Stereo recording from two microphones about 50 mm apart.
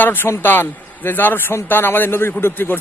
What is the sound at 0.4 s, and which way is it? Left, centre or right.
A man's voice, left.